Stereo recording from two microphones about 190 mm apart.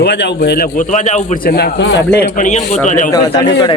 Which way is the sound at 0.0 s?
65° left (ahead or behind).